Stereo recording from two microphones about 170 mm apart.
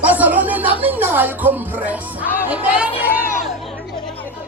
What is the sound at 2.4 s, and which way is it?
Music, 10° right (ahead or behind).